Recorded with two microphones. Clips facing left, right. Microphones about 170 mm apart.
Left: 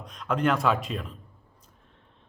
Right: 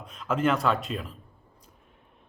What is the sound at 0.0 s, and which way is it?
A man's voice, 5° right (ahead or behind).